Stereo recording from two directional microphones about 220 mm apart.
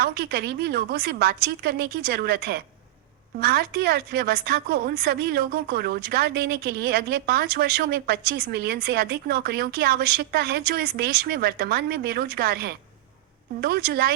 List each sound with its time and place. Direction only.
0.0 s a woman's voice: 45° right (ahead or behind)